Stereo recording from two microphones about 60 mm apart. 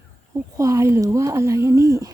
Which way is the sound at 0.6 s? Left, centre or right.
Right.